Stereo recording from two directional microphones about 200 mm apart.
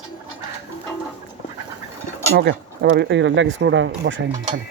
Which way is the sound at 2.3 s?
60° right (ahead or behind).